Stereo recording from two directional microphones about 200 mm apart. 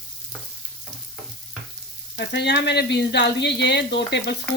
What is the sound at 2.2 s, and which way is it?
Speech, 55° left (ahead or behind).